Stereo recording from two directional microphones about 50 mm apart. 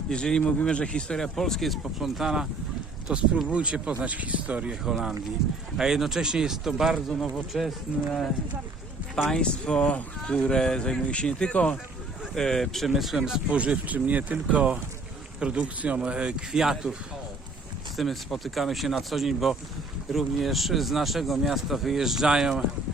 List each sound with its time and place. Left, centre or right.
0.1 s speech: centre
3.1 s speech: centre
5.4 s speech: centre
9.3 s speech: centre
12.3 s speech: centre
13.5 s speech: right
16.5 s speech: centre
17.9 s speech: centre